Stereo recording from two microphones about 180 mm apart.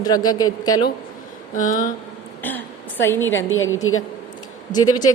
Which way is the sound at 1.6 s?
45° left (ahead or behind).